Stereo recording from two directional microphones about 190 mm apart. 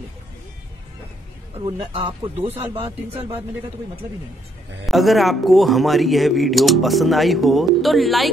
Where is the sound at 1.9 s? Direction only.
30° right (ahead or behind).